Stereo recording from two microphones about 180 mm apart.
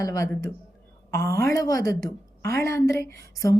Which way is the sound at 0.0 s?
20° left (ahead or behind).